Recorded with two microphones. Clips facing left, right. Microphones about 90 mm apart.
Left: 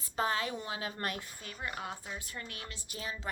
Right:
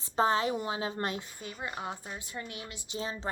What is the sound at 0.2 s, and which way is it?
Speech, 30° right (ahead or behind).